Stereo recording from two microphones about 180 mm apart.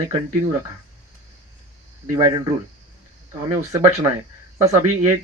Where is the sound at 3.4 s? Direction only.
20° right (ahead or behind).